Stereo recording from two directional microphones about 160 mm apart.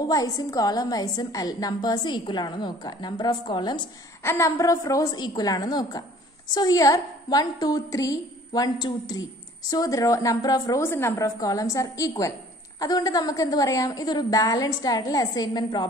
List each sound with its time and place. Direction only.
0.1 s a woman's voice: 25° left (ahead or behind)
4.2 s a woman's voice: 15° left (ahead or behind)